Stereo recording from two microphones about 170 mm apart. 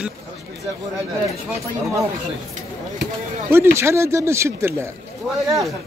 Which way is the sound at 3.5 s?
15° right (ahead or behind).